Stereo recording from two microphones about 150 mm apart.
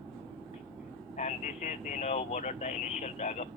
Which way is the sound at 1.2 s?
55° left (ahead or behind).